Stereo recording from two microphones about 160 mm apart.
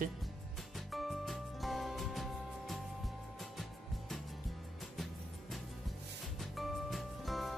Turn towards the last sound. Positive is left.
turn(degrees=0)  # may be behind; listen again after turning